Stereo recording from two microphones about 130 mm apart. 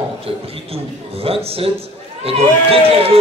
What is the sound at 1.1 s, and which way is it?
A man's voice, 50° right (ahead or behind).